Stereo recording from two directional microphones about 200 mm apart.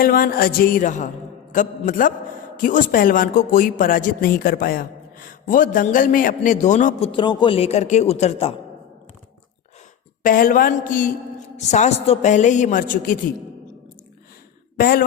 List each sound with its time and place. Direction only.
0.0 s a woman's voice: 45° left (ahead or behind)
7.1 s a man's voice: 20° left (ahead or behind)
10.2 s a woman's voice: 45° left (ahead or behind)
14.8 s speech: 50° left (ahead or behind)